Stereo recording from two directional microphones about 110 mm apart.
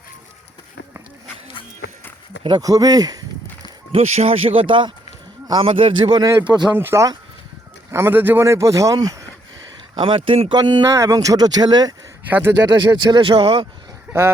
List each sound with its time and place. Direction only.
2.6 s speech: 35° right (ahead or behind)
3.9 s speech: 75° right (ahead or behind); by 6.7 s 40° right (ahead or behind)
6.7 s speech: 25° right (ahead or behind)
9.9 s speech: 50° right (ahead or behind)
10.5 s speech: 40° right (ahead or behind)
10.8 s speech: 30° right (ahead or behind)
12.3 s speech: 20° right (ahead or behind)
12.6 s speech: 45° right (ahead or behind)
14.1 s speech: 20° right (ahead or behind)